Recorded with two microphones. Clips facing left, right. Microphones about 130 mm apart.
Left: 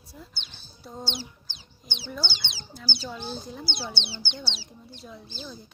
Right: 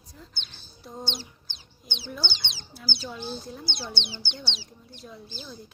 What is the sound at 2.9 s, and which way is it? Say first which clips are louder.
Speech: even; centre (ahead or behind).